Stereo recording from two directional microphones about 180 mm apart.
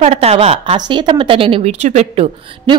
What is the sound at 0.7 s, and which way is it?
A woman's voice, 25° right (ahead or behind).